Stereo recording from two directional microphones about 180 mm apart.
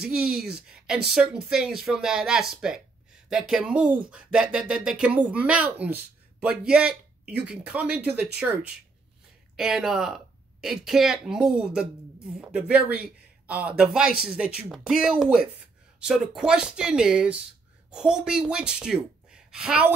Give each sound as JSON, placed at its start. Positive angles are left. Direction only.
{"t": 0.0, "sound": "speech", "side_deg": -5}
{"t": 9.6, "sound": "a woman's voice", "side_deg": -5}